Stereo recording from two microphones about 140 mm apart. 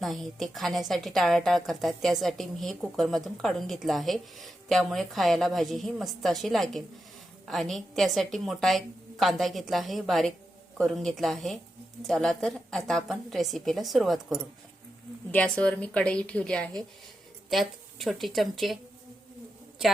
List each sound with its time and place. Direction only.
0.0 s a woman's voice: centre (ahead or behind)